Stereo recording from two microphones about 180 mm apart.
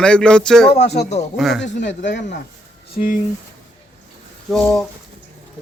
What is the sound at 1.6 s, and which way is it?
Speech, 80° left.